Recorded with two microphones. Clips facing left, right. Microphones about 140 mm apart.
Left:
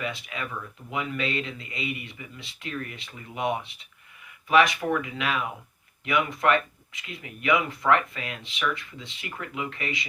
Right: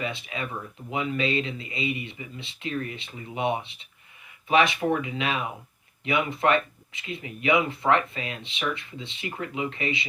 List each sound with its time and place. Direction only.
0.0 s speech: 25° right (ahead or behind)